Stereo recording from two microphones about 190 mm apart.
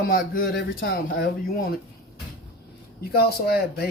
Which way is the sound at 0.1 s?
50° left (ahead or behind).